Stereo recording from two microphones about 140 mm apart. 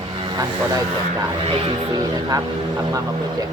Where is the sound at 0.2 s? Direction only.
30° right (ahead or behind).